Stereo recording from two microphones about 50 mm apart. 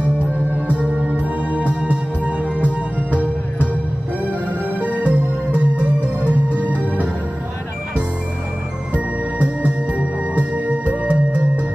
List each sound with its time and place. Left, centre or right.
0.3 s music: right
8.9 s music: right